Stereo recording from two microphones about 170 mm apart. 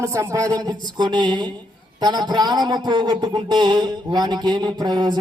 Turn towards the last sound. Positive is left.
turn(degrees=-25)  # may be behind; listen again after turning